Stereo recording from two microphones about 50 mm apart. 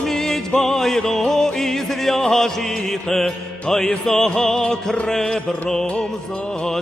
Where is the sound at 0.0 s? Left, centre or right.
Centre.